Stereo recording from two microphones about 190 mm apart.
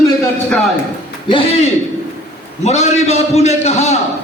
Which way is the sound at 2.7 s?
35° left (ahead or behind).